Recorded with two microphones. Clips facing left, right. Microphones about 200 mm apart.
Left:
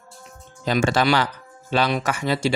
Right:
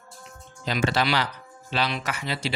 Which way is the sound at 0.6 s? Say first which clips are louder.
Left 5 dB; 45° left (ahead or behind).